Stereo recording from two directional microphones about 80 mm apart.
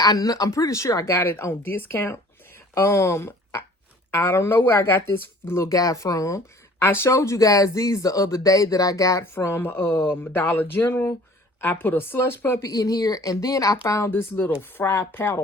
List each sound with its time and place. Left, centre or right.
0.0 s speech: left
9.3 s speech: left
12.6 s speech: left
14.1 s speech: left